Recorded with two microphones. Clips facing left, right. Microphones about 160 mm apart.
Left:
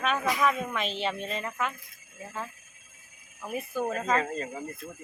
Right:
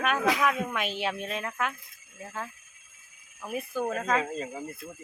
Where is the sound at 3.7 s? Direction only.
Centre (ahead or behind).